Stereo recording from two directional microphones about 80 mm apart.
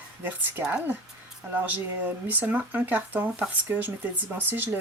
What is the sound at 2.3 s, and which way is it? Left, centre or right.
Speech, right.